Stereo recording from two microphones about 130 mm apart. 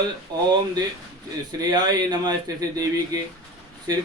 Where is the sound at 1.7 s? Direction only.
30° right (ahead or behind).